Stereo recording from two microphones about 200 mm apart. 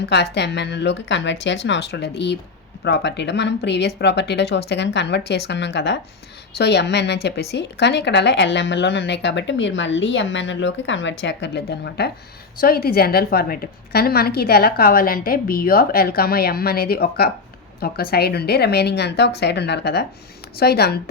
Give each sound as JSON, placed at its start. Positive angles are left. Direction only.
{"t": 0.0, "sound": "a woman's voice", "side_deg": 60}